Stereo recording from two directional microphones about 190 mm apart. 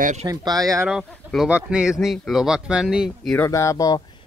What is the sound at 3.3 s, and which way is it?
Speech, 15° left (ahead or behind).